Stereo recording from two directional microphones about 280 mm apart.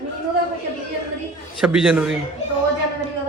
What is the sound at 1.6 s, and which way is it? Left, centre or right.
Speech, centre.